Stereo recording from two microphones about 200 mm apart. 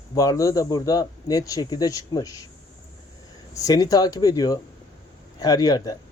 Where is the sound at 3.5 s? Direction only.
15° left (ahead or behind).